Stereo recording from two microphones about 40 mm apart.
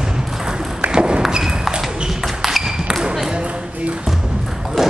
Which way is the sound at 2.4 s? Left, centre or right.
Centre.